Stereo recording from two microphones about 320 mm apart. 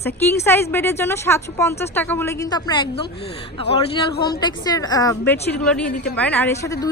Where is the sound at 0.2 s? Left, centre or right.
Centre.